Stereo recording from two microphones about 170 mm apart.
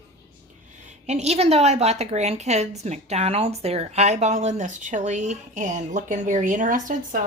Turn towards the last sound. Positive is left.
turn(degrees=-50)  # may be behind; listen again after turning